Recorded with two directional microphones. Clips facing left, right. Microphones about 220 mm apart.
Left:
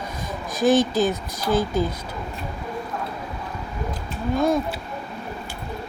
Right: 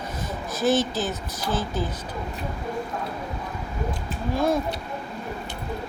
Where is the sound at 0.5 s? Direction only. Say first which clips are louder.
Left 4 dB; 15° left (ahead or behind).